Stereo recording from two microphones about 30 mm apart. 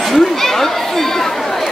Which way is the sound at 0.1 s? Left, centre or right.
Centre.